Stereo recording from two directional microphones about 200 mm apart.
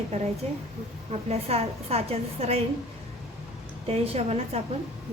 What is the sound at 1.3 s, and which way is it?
A woman's voice, 30° right (ahead or behind).